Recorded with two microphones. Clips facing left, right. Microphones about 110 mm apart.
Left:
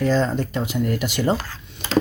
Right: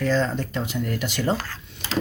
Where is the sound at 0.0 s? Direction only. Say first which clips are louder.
Left 3 dB; 15° left (ahead or behind).